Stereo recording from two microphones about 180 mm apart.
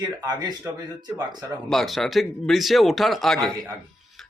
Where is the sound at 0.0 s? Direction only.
20° right (ahead or behind).